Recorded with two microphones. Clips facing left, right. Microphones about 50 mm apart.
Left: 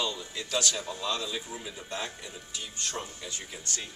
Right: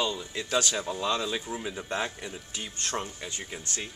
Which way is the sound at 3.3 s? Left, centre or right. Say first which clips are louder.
Right 1 dB; centre.